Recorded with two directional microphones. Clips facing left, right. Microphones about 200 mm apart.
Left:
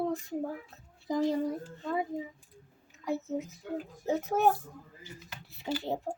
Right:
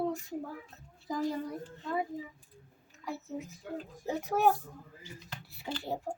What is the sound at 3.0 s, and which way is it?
Speech, 20° left (ahead or behind).